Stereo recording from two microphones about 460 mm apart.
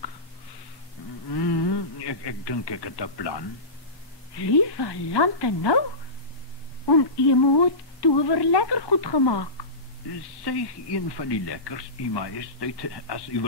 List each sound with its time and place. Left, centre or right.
1.3 s speech: left
6.9 s speech: left